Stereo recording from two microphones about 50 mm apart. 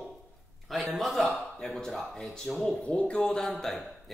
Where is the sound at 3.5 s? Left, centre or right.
Centre.